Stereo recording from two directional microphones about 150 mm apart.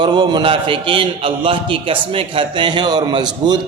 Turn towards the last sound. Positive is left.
turn(degrees=-30)  # may be behind; listen again after turning